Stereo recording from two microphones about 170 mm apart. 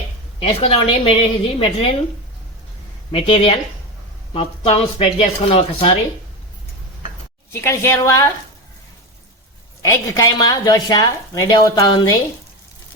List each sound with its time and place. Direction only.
0.3 s a woman's voice: 35° left (ahead or behind)
3.1 s a woman's voice: 30° left (ahead or behind)
7.5 s a woman's voice: 15° left (ahead or behind)
9.8 s a woman's voice: 15° left (ahead or behind)